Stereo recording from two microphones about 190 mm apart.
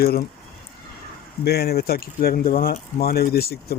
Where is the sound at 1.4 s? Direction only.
55° left (ahead or behind).